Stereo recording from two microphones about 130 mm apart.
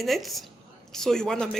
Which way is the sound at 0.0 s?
Centre (ahead or behind).